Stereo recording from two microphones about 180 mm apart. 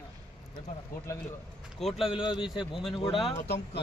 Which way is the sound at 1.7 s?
Centre (ahead or behind).